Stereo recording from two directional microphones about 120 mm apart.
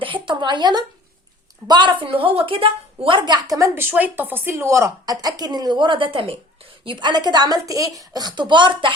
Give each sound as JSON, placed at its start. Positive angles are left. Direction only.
{"t": 0.0, "sound": "a sound", "side_deg": -45}
{"t": 1.6, "sound": "a woman's voice", "side_deg": -40}
{"t": 3.8, "sound": "a woman's voice", "side_deg": -15}